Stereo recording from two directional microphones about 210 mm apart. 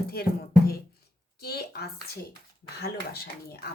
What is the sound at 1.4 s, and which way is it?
Speech, 50° left (ahead or behind).